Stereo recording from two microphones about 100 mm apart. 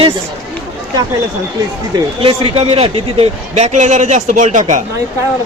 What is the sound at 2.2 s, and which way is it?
A man's voice, 60° right (ahead or behind).